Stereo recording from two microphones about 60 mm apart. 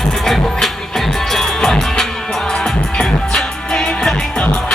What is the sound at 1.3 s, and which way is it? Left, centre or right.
Music, centre.